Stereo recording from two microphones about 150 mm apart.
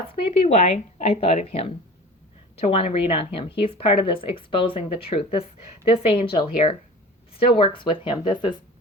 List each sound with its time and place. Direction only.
0.1 s a woman's voice: 45° left (ahead or behind)